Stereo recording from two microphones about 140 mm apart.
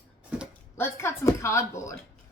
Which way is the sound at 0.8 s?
20° left (ahead or behind).